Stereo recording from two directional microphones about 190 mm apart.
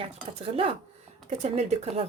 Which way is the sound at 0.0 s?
30° right (ahead or behind).